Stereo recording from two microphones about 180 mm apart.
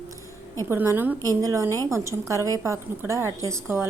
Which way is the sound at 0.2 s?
15° left (ahead or behind).